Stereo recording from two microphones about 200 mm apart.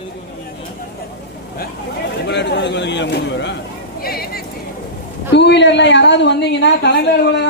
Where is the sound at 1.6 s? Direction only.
55° left (ahead or behind).